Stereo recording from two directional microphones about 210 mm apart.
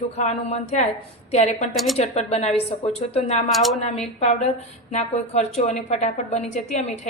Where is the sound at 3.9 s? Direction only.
30° left (ahead or behind).